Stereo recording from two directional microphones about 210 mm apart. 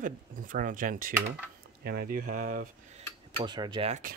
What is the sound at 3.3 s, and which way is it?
Mechanisms, 20° right (ahead or behind).